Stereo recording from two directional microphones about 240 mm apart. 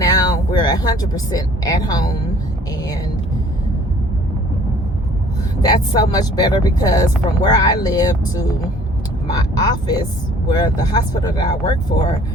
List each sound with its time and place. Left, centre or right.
0.0 s speech: centre
5.6 s speech: centre